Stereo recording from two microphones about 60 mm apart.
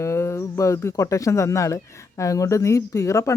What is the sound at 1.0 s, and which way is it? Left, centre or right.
Speech, left.